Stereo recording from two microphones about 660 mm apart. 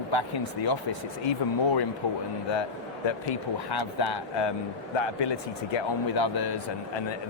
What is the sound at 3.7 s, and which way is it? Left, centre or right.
Speech, left.